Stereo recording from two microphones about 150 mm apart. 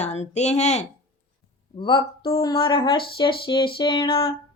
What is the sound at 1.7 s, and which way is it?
Speech, 30° left (ahead or behind).